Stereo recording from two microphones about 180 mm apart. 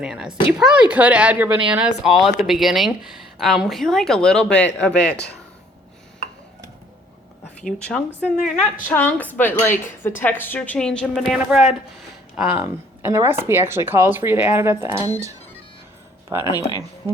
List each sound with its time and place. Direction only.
0.0 s speech: 5° right (ahead or behind)
5.1 s speech: 70° left (ahead or behind)
7.6 s speech: 5° left (ahead or behind)
12.5 s speech: 15° right (ahead or behind)
16.4 s speech: 20° left (ahead or behind)